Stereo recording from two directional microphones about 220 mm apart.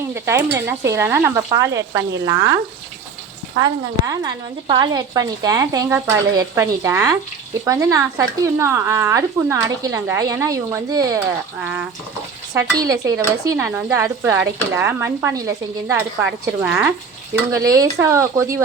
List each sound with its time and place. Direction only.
0.1 s speech: 10° right (ahead or behind)
3.6 s speech: 15° right (ahead or behind)
12.5 s speech: 15° right (ahead or behind)